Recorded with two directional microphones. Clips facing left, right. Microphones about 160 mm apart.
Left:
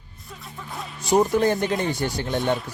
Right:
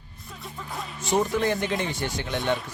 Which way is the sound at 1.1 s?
40° left (ahead or behind).